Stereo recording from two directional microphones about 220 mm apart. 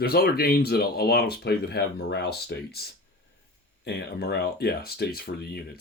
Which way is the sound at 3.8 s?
45° left (ahead or behind).